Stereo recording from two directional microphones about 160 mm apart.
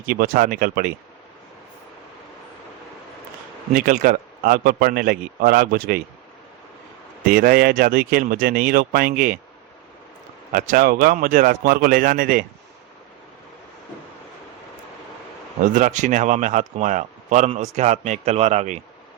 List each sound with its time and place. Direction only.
0.0 s a man's voice: 65° right (ahead or behind)
3.8 s a man's voice: 60° right (ahead or behind)
7.3 s a man's voice: 65° right (ahead or behind)
10.5 s a man's voice: 55° right (ahead or behind)
15.6 s speech: 55° right (ahead or behind)